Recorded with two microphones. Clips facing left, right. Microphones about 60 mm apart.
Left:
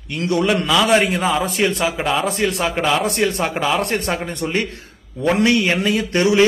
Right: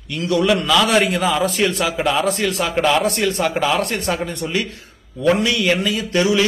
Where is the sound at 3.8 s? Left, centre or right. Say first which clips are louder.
Even; left.